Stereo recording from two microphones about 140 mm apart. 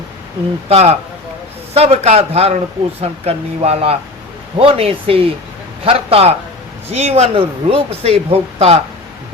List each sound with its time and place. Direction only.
0.7 s speech: 45° right (ahead or behind)